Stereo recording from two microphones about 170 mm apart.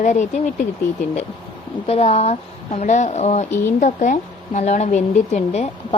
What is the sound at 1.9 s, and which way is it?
Speech, 35° left (ahead or behind).